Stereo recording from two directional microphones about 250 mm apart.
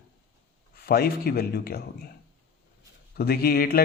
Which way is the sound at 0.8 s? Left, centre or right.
Left.